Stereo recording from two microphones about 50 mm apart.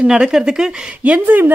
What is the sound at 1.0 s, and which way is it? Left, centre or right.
Speech, right.